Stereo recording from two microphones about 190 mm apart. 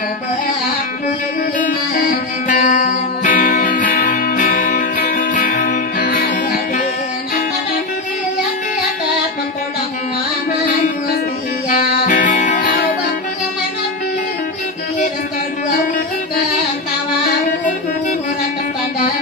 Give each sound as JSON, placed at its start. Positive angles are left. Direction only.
{"t": 1.6, "sound": "music", "side_deg": 45}
{"t": 11.7, "sound": "music", "side_deg": 45}